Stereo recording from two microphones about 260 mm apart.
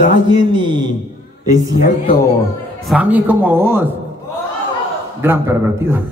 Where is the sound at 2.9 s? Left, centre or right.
Centre.